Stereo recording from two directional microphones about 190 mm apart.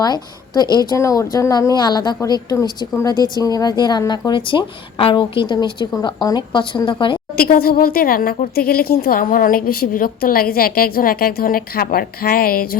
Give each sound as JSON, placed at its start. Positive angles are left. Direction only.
{"t": 0.0, "sound": "speech", "side_deg": 20}
{"t": 7.3, "sound": "a woman's voice", "side_deg": 50}